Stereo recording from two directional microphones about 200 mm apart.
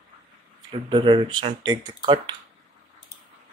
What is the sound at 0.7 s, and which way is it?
Speech, 25° right (ahead or behind).